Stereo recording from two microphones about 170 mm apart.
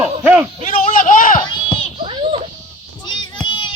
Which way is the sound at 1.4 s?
30° left (ahead or behind).